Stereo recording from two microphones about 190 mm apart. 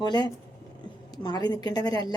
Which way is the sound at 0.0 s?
20° left (ahead or behind).